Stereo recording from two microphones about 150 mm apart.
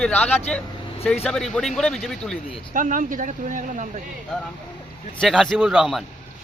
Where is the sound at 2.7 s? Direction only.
60° right (ahead or behind).